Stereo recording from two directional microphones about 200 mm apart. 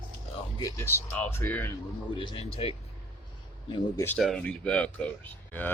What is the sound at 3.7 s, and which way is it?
Speech, 25° left (ahead or behind).